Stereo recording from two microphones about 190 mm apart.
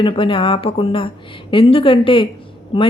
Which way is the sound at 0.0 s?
25° left (ahead or behind).